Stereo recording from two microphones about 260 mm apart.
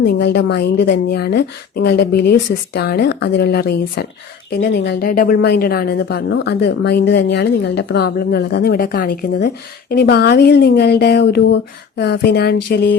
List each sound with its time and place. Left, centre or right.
0.0 s a woman's voice: left